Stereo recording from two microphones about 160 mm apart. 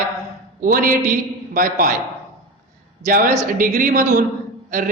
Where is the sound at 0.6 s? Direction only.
60° right (ahead or behind).